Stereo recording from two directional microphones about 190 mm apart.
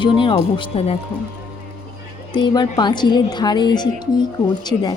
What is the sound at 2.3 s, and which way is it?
Speech, 25° left (ahead or behind).